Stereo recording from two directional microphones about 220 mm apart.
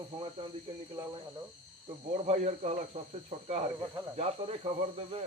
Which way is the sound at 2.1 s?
30° right (ahead or behind).